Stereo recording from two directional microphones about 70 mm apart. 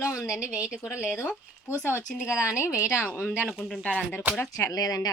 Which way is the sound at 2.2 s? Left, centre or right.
Centre.